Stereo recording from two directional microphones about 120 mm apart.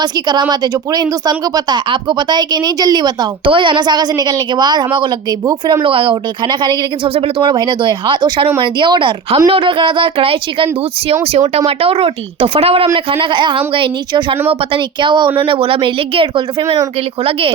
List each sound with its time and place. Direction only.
0.0 s speech: 35° right (ahead or behind)
1.5 s a woman's voice: 40° right (ahead or behind)
5.8 s speech: 50° right (ahead or behind)
11.1 s speech: 60° right (ahead or behind); by 16.8 s 45° right (ahead or behind)